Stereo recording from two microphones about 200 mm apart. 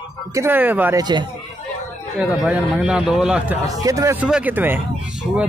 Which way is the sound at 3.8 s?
15° right (ahead or behind).